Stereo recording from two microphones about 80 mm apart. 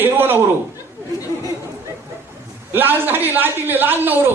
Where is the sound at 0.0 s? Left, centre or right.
Right.